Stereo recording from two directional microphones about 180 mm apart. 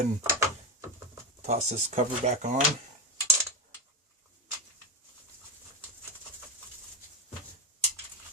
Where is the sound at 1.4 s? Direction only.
40° right (ahead or behind).